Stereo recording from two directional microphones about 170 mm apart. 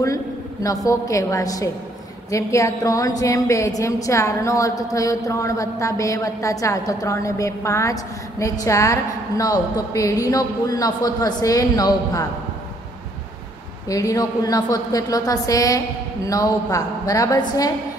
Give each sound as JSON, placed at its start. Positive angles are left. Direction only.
{"t": 0.0, "sound": "a woman's voice", "side_deg": 20}
{"t": 13.8, "sound": "a woman's voice", "side_deg": 20}